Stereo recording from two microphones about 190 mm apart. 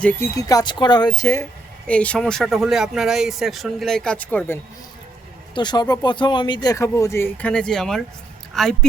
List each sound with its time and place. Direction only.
0.0 s speech: 10° left (ahead or behind)
1.9 s speech: 5° left (ahead or behind)
5.5 s speech: 20° left (ahead or behind); by 8.7 s centre (ahead or behind)